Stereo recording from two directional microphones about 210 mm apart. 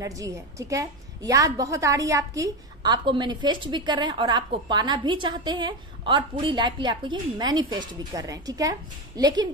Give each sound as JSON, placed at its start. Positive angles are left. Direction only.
{"t": 0.0, "sound": "a woman's voice", "side_deg": -15}